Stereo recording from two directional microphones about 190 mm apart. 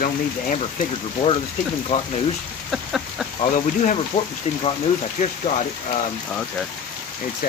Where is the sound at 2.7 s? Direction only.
Centre (ahead or behind).